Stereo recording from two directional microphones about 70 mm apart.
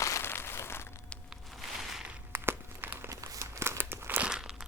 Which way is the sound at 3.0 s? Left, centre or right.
Right.